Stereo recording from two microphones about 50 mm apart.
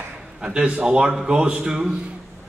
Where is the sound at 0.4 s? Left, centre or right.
Centre.